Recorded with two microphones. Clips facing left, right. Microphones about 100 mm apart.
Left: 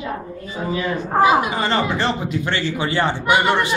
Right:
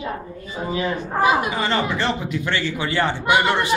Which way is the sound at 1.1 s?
25° left (ahead or behind).